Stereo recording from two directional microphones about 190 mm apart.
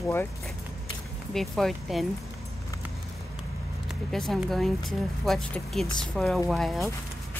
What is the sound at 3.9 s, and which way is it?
Speech, centre (ahead or behind).